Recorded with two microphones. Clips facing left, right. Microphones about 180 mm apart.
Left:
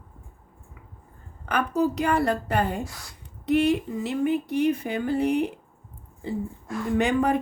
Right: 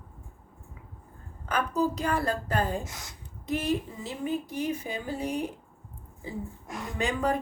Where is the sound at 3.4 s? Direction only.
70° left (ahead or behind).